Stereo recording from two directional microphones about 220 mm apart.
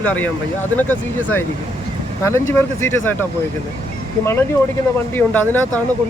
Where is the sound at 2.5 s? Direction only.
10° left (ahead or behind).